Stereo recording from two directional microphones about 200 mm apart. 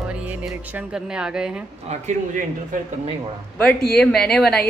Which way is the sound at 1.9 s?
40° right (ahead or behind).